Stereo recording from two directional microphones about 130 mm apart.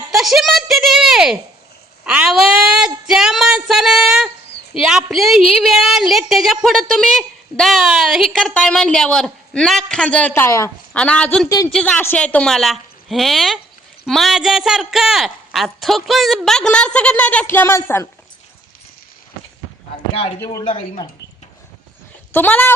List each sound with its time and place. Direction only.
0.1 s a sound: centre (ahead or behind)
4.8 s a woman's voice: 5° right (ahead or behind); by 10.7 s 20° left (ahead or behind)
10.9 s a woman's voice: 10° left (ahead or behind)
11.4 s speech: 25° left (ahead or behind)
11.7 s a woman's voice: 5° left (ahead or behind)
20.4 s speech: 25° left (ahead or behind)
20.7 s speech: 50° left (ahead or behind)
22.3 s speech: 15° left (ahead or behind)